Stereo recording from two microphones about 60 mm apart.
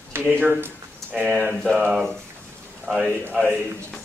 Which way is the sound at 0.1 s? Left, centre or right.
Right.